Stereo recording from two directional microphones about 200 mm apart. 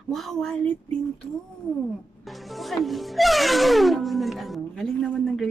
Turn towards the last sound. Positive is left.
turn(degrees=0)  # may be behind; listen again after turning